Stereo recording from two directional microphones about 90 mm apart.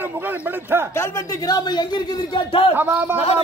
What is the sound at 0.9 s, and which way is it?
A man's voice, 35° left (ahead or behind).